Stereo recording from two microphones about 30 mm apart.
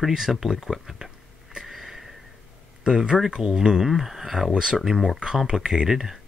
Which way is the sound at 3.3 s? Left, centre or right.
Right.